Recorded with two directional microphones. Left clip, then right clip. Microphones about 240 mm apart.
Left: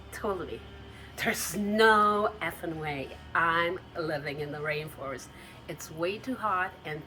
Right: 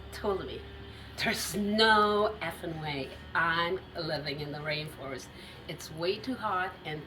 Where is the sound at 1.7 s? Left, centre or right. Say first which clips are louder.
Left 2 dB; left.